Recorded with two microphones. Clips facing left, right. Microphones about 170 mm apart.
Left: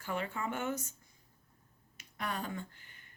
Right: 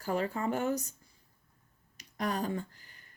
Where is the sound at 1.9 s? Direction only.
35° right (ahead or behind).